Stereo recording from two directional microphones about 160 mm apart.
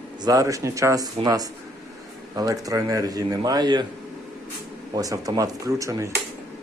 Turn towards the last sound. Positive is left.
turn(degrees=-20)  # may be behind; listen again after turning